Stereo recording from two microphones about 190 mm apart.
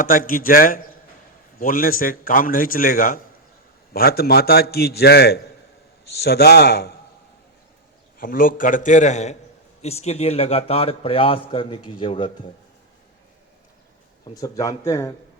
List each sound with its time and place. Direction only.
0.0 s a man's voice: 45° left (ahead or behind)
8.2 s a man's voice: 45° left (ahead or behind); by 12.3 s 25° left (ahead or behind)
14.3 s speech: 20° left (ahead or behind)